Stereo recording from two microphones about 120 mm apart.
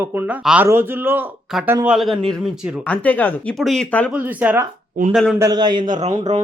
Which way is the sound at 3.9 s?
10° left (ahead or behind).